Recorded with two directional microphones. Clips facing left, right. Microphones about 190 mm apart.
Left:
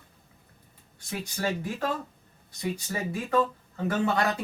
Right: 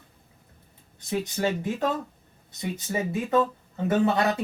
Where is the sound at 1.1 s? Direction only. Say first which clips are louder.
Right 4 dB; 20° right (ahead or behind).